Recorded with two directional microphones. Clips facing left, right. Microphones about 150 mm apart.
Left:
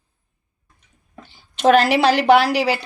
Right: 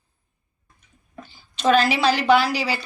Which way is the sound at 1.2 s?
70° left (ahead or behind).